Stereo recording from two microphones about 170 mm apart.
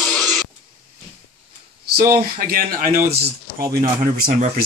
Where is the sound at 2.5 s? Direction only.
60° right (ahead or behind).